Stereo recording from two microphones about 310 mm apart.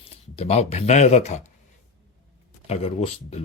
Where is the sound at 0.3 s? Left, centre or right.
Left.